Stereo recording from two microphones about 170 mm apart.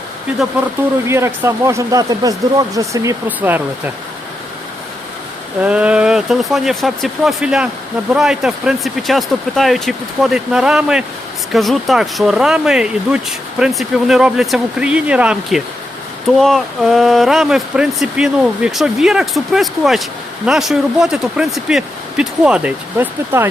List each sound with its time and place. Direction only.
1.0 s speech: 15° right (ahead or behind)
5.6 s speech: 5° right (ahead or behind)